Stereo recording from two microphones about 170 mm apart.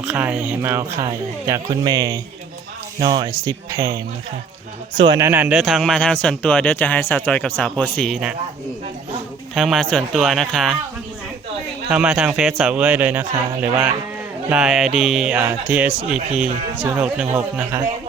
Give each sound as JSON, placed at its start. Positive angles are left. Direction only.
{"t": 0.0, "sound": "speech", "side_deg": -5}
{"t": 5.2, "sound": "speech", "side_deg": -10}
{"t": 9.6, "sound": "speech", "side_deg": 0}
{"t": 11.9, "sound": "speech", "side_deg": -5}